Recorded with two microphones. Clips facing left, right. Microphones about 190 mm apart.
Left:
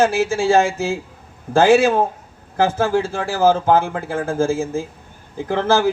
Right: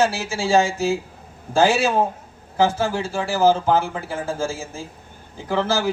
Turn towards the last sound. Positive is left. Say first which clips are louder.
# left 4 dB
turn(degrees=55)  # may be behind; listen again after turning